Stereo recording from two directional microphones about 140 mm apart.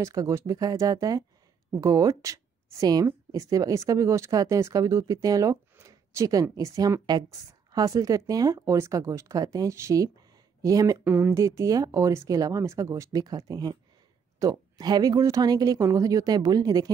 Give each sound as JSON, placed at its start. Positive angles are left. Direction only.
{"t": 0.0, "sound": "a woman's voice", "side_deg": -20}